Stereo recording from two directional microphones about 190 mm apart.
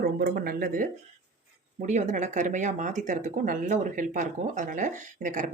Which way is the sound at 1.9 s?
40° right (ahead or behind).